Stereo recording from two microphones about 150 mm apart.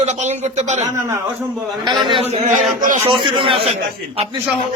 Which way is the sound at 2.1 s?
45° right (ahead or behind).